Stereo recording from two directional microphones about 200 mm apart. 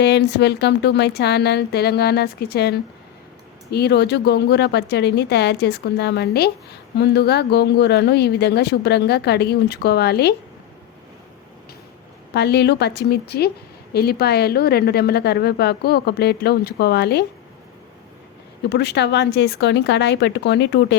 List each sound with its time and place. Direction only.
0.0 s a woman's voice: 60° left (ahead or behind)
12.3 s a woman's voice: 55° left (ahead or behind)
18.7 s a woman's voice: 60° left (ahead or behind)